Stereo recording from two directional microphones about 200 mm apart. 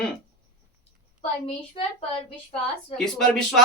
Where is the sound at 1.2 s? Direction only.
30° left (ahead or behind).